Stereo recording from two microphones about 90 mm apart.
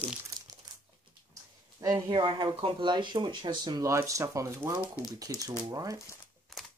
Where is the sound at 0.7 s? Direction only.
50° right (ahead or behind).